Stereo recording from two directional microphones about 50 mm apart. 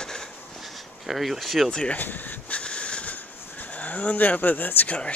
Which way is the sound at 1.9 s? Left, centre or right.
Left.